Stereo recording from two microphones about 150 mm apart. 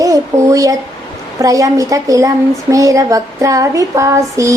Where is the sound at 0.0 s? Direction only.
20° right (ahead or behind).